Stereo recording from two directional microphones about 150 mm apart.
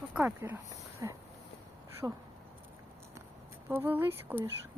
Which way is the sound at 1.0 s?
25° right (ahead or behind).